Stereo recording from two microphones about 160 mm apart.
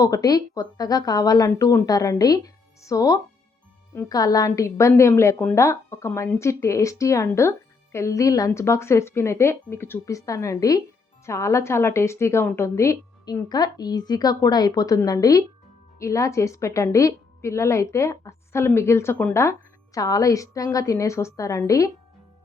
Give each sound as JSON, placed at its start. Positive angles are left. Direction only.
{"t": 0.0, "sound": "a woman's voice", "side_deg": 20}